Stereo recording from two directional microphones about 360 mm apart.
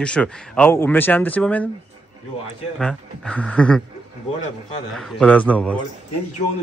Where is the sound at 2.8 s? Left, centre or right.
Centre.